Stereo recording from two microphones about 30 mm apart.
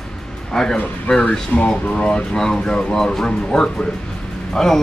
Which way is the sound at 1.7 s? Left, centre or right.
Left.